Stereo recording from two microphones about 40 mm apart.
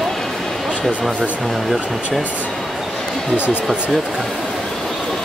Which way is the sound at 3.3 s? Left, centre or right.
Right.